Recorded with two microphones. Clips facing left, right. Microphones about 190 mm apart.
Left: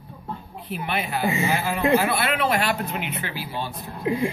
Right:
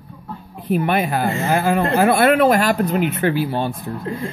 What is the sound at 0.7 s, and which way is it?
Speech, 50° right (ahead or behind).